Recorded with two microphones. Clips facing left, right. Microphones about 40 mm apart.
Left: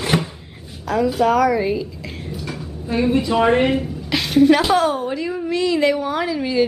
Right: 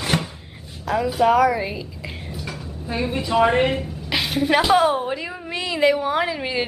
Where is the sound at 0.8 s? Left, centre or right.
Centre.